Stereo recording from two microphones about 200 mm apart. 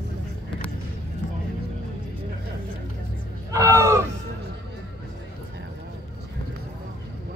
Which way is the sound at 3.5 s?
15° right (ahead or behind).